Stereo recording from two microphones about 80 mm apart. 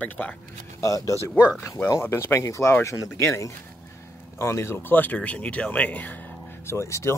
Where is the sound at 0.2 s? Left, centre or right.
Left.